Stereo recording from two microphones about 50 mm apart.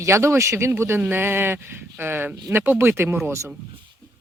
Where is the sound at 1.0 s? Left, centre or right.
Right.